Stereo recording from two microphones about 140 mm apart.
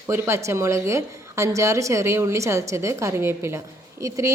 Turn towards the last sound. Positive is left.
turn(degrees=-20)  # may be behind; listen again after turning